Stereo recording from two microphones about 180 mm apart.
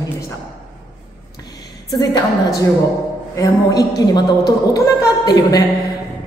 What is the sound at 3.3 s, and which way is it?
A woman's voice, 20° left (ahead or behind).